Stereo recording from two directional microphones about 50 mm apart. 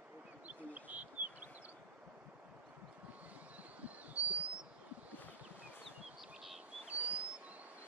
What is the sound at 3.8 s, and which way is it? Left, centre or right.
Bird, right.